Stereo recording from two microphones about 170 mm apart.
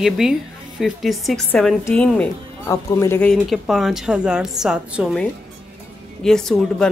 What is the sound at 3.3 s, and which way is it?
A woman's voice, centre (ahead or behind).